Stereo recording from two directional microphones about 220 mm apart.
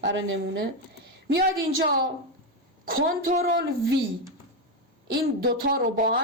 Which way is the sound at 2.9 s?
40° right (ahead or behind).